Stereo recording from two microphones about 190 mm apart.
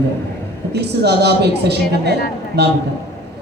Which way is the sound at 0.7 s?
60° right (ahead or behind).